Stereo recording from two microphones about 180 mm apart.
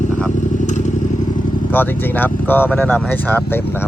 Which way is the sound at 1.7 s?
10° left (ahead or behind).